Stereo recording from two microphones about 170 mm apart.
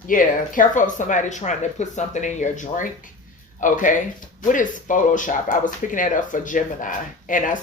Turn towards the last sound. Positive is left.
turn(degrees=50)  # may be behind; listen again after turning